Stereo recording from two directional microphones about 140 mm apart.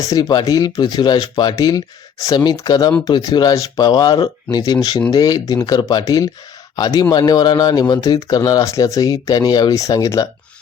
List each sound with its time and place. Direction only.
0.0 s speech: 25° left (ahead or behind)